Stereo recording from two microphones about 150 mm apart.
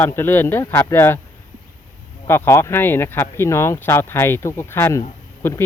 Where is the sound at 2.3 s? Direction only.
15° left (ahead or behind).